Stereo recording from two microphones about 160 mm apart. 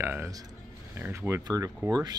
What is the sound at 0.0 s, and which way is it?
Speech, 15° right (ahead or behind).